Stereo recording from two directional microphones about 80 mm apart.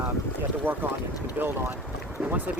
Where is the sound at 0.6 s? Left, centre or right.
Right.